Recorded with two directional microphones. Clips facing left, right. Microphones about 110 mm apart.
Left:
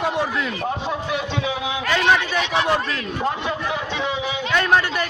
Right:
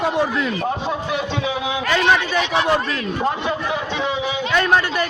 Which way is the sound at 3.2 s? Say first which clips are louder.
Right 1 dB; 30° right (ahead or behind).